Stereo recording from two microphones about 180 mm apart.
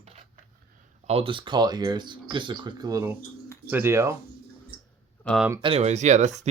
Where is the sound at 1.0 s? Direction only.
30° right (ahead or behind); by 4.1 s 15° right (ahead or behind).